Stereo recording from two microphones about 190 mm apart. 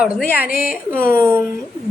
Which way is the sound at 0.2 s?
50° left (ahead or behind).